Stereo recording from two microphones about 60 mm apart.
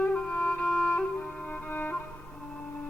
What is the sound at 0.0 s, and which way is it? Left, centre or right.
Music, left.